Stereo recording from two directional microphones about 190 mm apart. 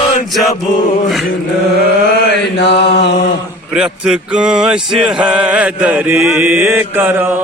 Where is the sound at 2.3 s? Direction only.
65° left (ahead or behind).